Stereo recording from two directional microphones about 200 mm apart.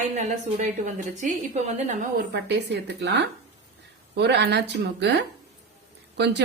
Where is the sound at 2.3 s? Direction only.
55° right (ahead or behind).